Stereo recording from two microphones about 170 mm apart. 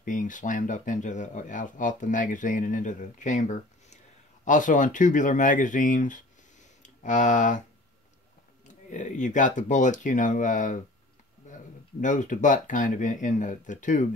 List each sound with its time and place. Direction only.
0.0 s speech: 50° left (ahead or behind)
8.6 s speech: 45° left (ahead or behind)
11.4 s a sound: 45° left (ahead or behind)
12.0 s speech: 45° left (ahead or behind)